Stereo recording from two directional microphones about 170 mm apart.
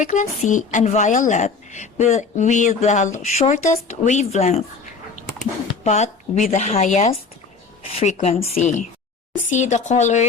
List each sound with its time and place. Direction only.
0.0 s a woman's voice: 45° left (ahead or behind)
5.8 s a woman's voice: 40° left (ahead or behind)